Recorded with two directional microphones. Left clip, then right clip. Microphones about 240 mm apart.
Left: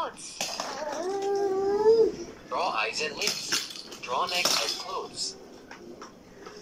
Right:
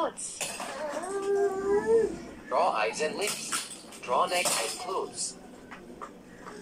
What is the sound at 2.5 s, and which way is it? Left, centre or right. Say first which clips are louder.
Speech: right 2 dB; centre.